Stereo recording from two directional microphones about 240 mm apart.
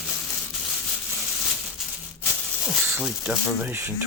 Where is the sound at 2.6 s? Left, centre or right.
Centre.